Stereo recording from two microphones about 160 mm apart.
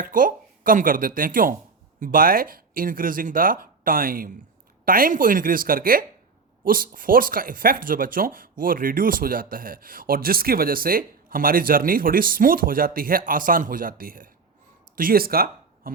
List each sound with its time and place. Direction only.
0.0 s speech: 60° right (ahead or behind)